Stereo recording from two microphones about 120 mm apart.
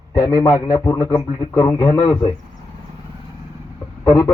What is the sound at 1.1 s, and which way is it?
Speech, 35° left (ahead or behind).